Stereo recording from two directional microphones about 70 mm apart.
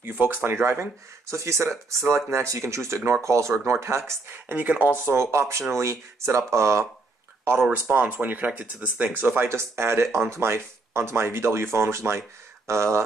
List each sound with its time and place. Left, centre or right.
0.0 s speech: right
4.5 s speech: right
5.1 s speech: right
7.9 s speech: right
9.1 s speech: right